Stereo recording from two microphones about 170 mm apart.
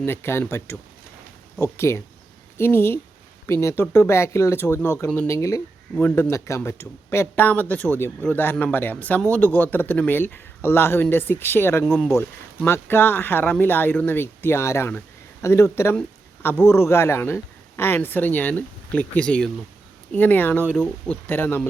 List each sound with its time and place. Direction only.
0.0 s speech: 15° left (ahead or behind)